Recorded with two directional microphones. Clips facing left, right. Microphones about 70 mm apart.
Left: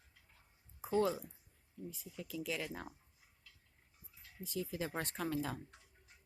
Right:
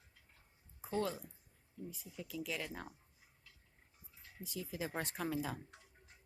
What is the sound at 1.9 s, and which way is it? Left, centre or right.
Speech, centre.